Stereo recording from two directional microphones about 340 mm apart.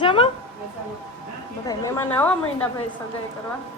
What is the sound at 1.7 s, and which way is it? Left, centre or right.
A woman's voice, centre.